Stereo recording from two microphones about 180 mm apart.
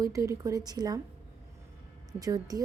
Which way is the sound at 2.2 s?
20° right (ahead or behind).